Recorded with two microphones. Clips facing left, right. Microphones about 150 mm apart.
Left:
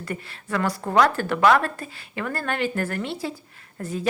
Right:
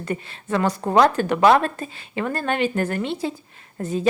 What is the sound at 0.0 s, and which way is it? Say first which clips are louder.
A woman's voice: right 4 dB; 20° right (ahead or behind).